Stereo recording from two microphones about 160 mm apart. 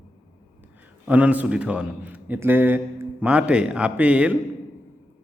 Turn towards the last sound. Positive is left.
turn(degrees=-10)  # may be behind; listen again after turning